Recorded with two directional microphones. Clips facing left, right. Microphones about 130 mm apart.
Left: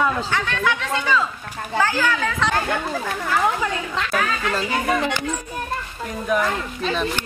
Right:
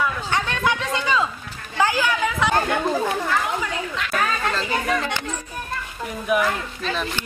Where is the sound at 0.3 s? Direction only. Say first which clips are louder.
Even; 20° right (ahead or behind).